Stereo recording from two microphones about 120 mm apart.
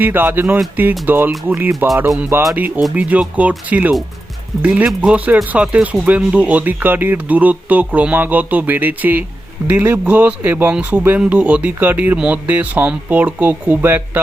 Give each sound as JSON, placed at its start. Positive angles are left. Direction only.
{"t": 0.0, "sound": "speech", "side_deg": -15}